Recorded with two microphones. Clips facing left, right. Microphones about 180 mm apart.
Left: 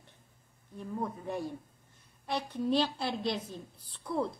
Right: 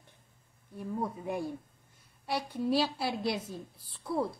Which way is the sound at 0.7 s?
10° right (ahead or behind).